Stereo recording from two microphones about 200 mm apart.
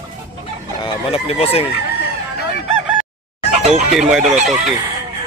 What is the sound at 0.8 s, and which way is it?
Speech, 30° left (ahead or behind).